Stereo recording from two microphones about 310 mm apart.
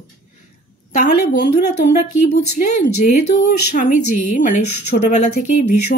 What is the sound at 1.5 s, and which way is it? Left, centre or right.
Speech, left.